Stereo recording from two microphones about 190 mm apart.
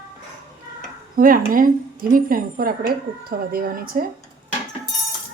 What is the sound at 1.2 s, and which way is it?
Speech, 50° right (ahead or behind).